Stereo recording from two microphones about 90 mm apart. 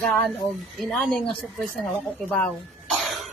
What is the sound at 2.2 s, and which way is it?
Speech, 20° left (ahead or behind).